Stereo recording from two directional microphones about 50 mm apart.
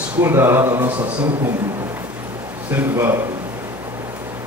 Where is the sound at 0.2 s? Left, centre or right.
Right.